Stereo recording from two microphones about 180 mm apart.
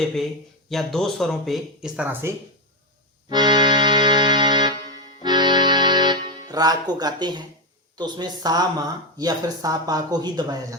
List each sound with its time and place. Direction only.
0.7 s speech: centre (ahead or behind)
3.2 s music: 25° right (ahead or behind)
5.2 s accordion: 25° right (ahead or behind)
6.5 s speech: 20° right (ahead or behind)